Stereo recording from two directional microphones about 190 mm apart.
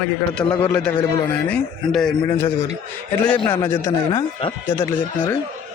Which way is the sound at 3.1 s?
5° left (ahead or behind).